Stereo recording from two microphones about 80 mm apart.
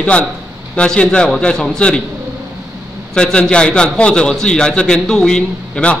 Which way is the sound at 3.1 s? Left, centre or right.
Centre.